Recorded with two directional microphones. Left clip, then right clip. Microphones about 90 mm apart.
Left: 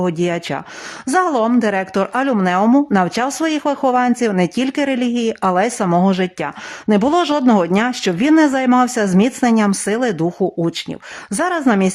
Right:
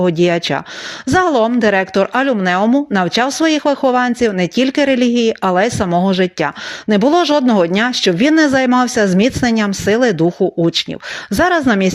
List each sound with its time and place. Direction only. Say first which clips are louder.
0.0 s speech: right 5 dB; 20° right (ahead or behind)
1.9 s speech: right 3 dB; 10° right (ahead or behind)
7.7 s speech: right 3 dB; 20° right (ahead or behind)
11.3 s speech: right 4 dB; 20° right (ahead or behind)